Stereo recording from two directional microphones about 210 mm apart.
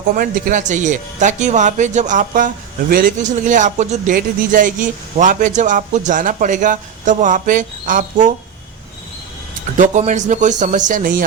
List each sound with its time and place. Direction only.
0.2 s speech: 40° right (ahead or behind)
9.7 s speech: 35° right (ahead or behind)